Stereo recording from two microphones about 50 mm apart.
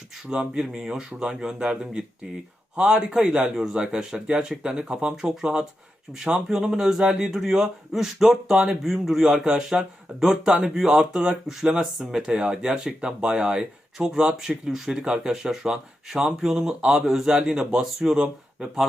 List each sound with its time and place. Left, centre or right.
0.3 s speech: centre